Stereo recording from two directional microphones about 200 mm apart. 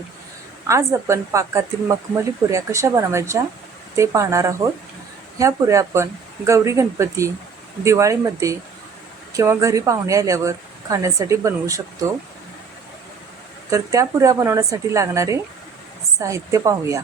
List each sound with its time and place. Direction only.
0.7 s speech: 15° right (ahead or behind)
13.7 s speech: 15° right (ahead or behind)